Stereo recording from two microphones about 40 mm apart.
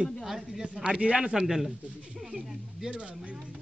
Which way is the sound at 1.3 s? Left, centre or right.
Centre.